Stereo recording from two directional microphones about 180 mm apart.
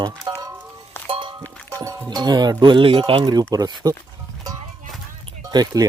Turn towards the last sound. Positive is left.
turn(degrees=-20)  # may be behind; listen again after turning